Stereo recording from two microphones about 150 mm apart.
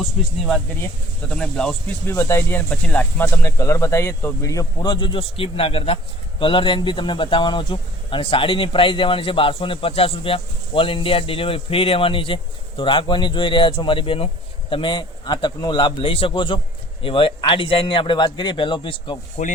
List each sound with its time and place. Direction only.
0.0 s speech: 5° left (ahead or behind); by 19.2 s 35° left (ahead or behind)